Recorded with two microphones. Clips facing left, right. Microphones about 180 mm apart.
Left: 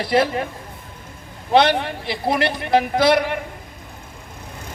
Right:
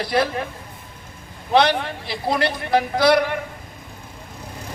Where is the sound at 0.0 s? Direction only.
25° left (ahead or behind).